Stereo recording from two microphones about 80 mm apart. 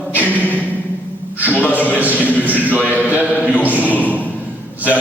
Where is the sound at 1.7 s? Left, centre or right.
Right.